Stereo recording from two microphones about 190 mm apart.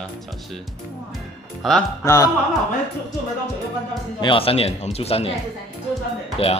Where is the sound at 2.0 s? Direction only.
15° left (ahead or behind).